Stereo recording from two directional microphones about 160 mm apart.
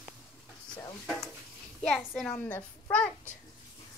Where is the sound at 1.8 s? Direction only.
5° left (ahead or behind).